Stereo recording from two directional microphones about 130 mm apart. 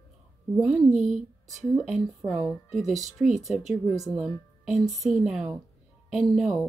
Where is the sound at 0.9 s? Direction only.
65° right (ahead or behind).